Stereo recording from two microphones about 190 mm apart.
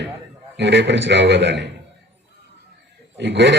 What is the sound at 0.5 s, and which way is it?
A man's voice, 65° right (ahead or behind).